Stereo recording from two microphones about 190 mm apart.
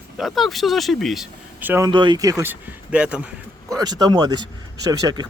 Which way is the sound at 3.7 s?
20° right (ahead or behind).